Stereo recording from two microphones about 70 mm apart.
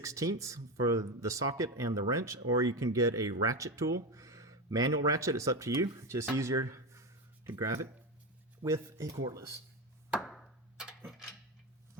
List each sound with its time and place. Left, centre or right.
0.0 s speech: right
5.7 s speech: right
6.0 s speech: right
10.2 s a sound: centre